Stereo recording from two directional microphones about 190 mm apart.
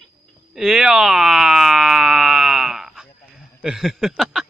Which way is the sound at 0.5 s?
Centre (ahead or behind).